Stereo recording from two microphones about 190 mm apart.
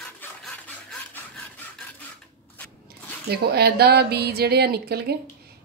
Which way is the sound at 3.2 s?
55° right (ahead or behind).